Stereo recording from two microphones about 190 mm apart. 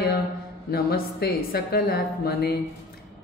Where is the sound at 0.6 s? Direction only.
50° left (ahead or behind).